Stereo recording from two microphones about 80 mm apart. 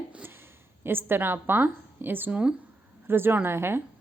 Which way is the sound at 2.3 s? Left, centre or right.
Centre.